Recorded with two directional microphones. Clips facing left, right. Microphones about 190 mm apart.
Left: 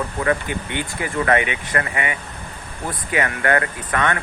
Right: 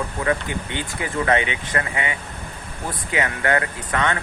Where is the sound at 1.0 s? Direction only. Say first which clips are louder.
Left 1 dB; 20° right (ahead or behind).